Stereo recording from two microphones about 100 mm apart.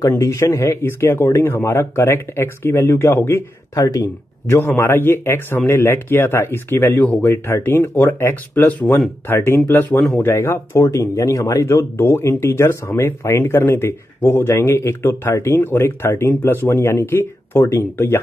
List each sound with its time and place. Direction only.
0.0 s speech: 30° left (ahead or behind)